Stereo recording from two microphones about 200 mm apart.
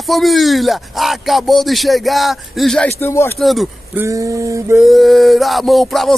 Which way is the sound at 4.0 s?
15° right (ahead or behind).